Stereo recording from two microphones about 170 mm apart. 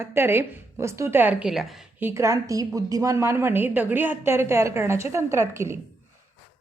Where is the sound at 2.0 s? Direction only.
15° right (ahead or behind).